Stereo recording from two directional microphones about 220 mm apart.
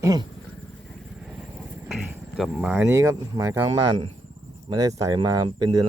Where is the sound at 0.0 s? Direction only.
15° right (ahead or behind).